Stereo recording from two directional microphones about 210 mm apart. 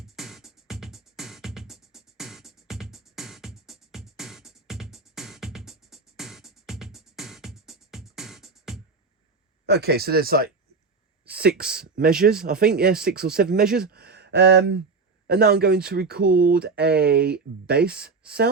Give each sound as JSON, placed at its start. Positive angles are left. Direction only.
{"t": 0.0, "sound": "music", "side_deg": 0}
{"t": 9.6, "sound": "speech", "side_deg": -50}
{"t": 11.3, "sound": "a sound", "side_deg": -50}
{"t": 11.7, "sound": "speech", "side_deg": -45}